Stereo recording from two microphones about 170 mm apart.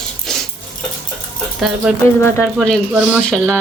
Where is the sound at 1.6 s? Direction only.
Centre (ahead or behind).